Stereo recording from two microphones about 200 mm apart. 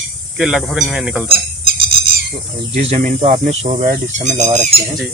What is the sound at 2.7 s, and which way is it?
Speech, 35° right (ahead or behind).